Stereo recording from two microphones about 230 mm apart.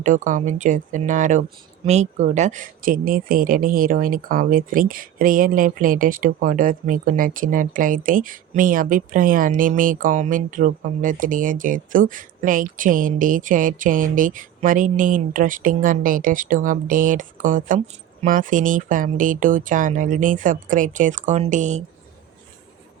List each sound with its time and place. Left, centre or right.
0.0 s speech: right